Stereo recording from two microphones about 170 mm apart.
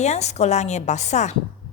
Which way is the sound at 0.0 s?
40° left (ahead or behind).